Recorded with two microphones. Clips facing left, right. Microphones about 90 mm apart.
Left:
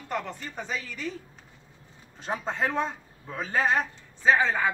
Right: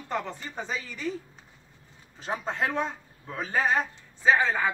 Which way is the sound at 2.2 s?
Centre (ahead or behind).